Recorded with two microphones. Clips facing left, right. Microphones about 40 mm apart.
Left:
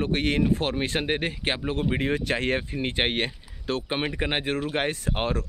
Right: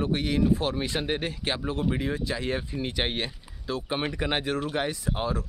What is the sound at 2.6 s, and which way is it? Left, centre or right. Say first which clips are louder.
Speech: left 3 dB; left.